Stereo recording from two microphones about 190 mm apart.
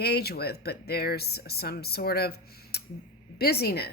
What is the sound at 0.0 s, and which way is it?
Speech, 55° left (ahead or behind).